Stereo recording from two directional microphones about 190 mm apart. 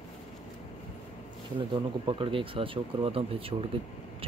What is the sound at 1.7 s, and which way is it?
Speech, 25° right (ahead or behind).